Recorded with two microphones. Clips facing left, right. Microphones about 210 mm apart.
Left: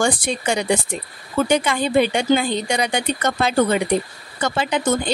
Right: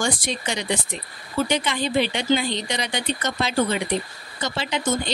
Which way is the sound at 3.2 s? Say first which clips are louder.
Left 5 dB; 55° left (ahead or behind).